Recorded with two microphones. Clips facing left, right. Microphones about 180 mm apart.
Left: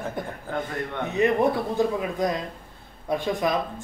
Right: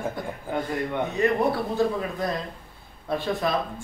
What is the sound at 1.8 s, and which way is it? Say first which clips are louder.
Speech: even; 15° left (ahead or behind).